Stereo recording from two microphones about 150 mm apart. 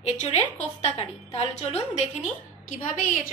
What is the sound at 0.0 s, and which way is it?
A woman's voice, 50° left (ahead or behind).